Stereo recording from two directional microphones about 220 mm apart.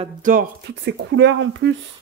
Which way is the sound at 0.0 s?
40° right (ahead or behind).